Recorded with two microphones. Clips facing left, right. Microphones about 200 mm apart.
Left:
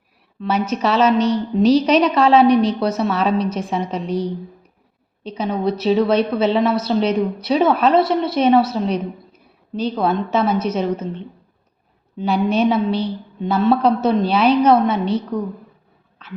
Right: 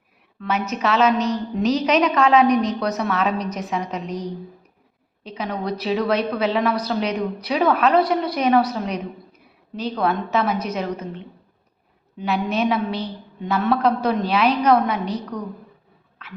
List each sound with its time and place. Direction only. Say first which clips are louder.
0.3 s a woman's voice: left 4 dB; 30° left (ahead or behind)
5.4 s a woman's voice: left 5 dB; 25° left (ahead or behind)